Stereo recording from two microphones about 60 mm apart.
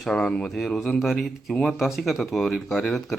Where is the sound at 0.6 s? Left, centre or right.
Centre.